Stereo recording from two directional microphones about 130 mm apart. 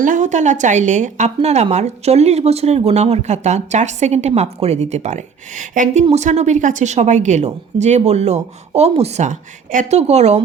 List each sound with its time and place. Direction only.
0.0 s speech: 80° right; by 10.4 s 55° right (ahead or behind)